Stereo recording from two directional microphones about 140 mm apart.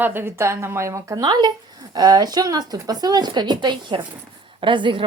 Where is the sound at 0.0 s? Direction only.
15° right (ahead or behind).